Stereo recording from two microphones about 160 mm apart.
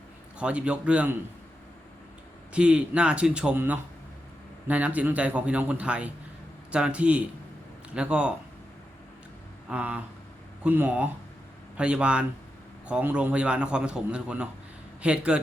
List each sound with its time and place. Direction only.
0.3 s a man's voice: 5° right (ahead or behind)
2.5 s a man's voice: 5° right (ahead or behind)
9.6 s a man's voice: 5° right (ahead or behind)